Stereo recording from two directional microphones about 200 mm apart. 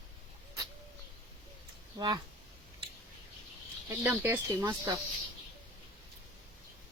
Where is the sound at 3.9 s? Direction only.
10° right (ahead or behind).